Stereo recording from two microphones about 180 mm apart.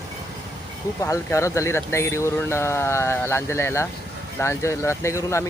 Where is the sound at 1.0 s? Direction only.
15° left (ahead or behind).